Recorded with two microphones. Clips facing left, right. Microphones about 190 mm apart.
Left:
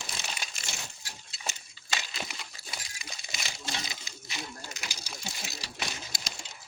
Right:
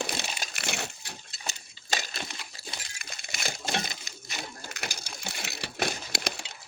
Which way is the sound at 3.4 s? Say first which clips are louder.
Right 7 dB; 55° right (ahead or behind).